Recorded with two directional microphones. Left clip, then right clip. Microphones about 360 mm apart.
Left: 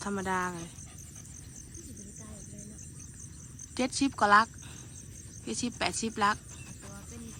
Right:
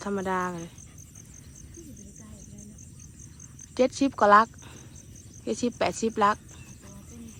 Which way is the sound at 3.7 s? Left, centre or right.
Centre.